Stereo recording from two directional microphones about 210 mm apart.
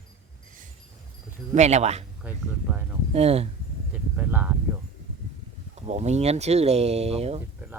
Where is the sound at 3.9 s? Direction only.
5° right (ahead or behind).